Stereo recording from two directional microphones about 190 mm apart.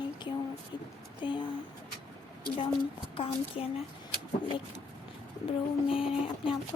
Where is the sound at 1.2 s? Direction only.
25° left (ahead or behind).